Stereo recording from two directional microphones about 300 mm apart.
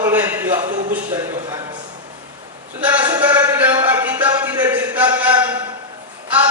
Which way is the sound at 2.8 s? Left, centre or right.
Centre.